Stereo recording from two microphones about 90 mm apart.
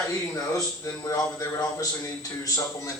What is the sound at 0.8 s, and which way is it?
Speech, 35° left (ahead or behind).